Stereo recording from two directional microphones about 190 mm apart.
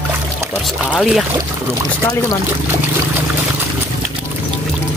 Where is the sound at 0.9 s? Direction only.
Centre (ahead or behind).